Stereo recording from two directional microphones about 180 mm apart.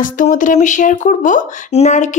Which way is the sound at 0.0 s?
45° left (ahead or behind).